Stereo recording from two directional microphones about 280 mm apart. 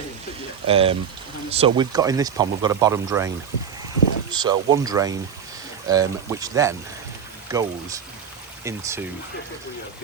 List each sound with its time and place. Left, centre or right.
0.7 s speech: centre